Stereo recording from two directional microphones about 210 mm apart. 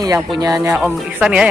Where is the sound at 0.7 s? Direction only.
5° right (ahead or behind).